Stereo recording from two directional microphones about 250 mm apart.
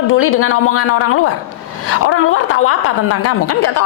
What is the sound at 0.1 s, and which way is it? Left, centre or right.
A woman's voice, left.